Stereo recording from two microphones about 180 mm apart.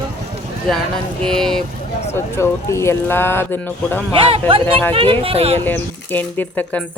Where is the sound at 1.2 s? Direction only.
5° left (ahead or behind).